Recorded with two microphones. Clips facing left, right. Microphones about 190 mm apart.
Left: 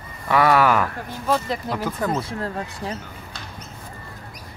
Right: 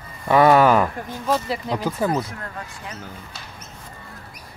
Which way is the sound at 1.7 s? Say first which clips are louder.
Right 4 dB; 10° right (ahead or behind).